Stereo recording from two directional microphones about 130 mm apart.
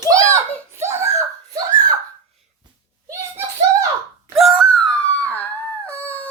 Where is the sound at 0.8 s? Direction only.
20° right (ahead or behind).